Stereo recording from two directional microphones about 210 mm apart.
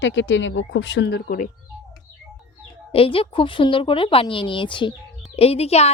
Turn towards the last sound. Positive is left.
turn(degrees=30)  # may be behind; listen again after turning